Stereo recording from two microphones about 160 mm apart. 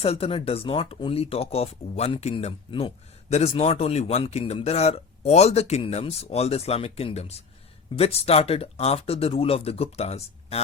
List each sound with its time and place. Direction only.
0.0 s speech: 35° left (ahead or behind)